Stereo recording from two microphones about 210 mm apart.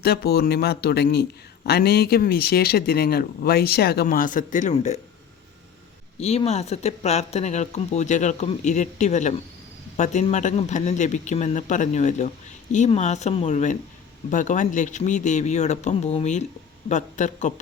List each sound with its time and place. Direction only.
0.0 s a man's voice: 50° left (ahead or behind); by 4.9 s 35° left (ahead or behind)
6.1 s speech: 30° left (ahead or behind)